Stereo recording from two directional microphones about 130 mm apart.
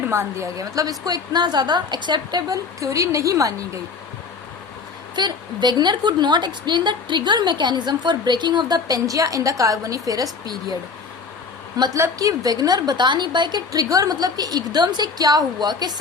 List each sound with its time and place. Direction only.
0.1 s a woman's voice: 20° right (ahead or behind)
5.1 s a woman's voice: 35° right (ahead or behind)
11.9 s a woman's voice: 25° right (ahead or behind)